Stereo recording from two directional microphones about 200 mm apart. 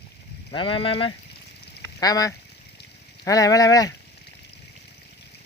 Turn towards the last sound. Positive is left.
turn(degrees=15)  # may be behind; listen again after turning